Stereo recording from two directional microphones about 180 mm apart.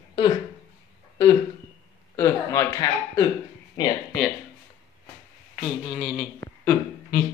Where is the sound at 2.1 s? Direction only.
15° left (ahead or behind).